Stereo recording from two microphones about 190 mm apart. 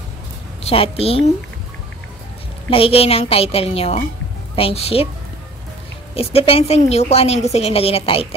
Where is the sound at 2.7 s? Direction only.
30° left (ahead or behind).